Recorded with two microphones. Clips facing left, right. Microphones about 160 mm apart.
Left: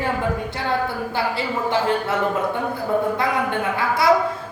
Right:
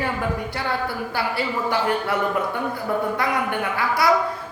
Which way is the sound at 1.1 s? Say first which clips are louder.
Even; 25° left (ahead or behind).